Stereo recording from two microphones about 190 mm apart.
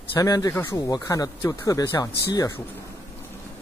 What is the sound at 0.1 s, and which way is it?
Speech, 15° left (ahead or behind).